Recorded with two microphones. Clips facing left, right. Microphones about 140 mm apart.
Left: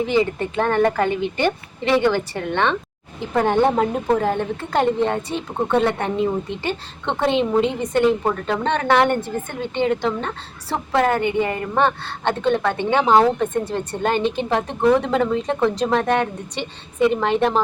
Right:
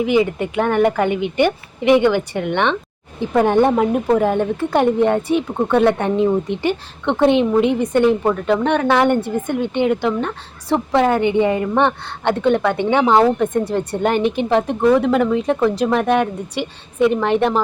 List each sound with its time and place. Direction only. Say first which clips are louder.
0.0 s a woman's voice: right 3 dB; 15° right (ahead or behind)
8.2 s speech: right 4 dB; centre (ahead or behind)
8.6 s a woman's voice: right 1 dB; 10° right (ahead or behind)
17.0 s a woman's voice: right 2 dB; 15° left (ahead or behind)